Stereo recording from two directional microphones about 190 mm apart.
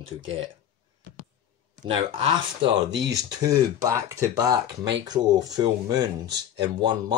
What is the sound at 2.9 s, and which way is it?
Speech, 65° right (ahead or behind).